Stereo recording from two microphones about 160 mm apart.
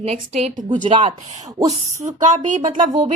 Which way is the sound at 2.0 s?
45° right (ahead or behind).